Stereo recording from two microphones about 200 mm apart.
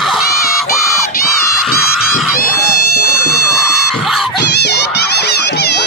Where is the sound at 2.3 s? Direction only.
45° left (ahead or behind).